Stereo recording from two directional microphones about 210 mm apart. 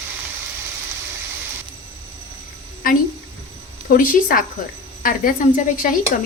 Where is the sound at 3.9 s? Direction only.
40° left (ahead or behind).